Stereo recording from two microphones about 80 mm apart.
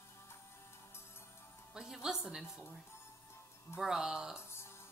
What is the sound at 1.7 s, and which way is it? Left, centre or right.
Speech, centre.